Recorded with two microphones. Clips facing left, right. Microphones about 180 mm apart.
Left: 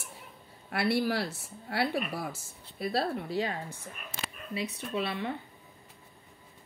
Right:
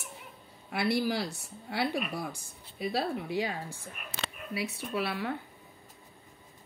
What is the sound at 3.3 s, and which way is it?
Speech, 10° right (ahead or behind).